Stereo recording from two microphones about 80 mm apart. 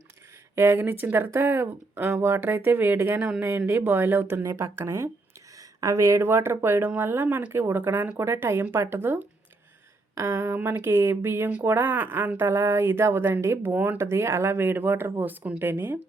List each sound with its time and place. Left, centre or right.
0.5 s speech: right
3.2 s speech: centre
3.7 s speech: right
14.0 s speech: right